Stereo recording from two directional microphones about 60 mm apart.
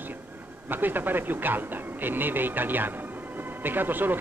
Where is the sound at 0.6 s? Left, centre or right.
Right.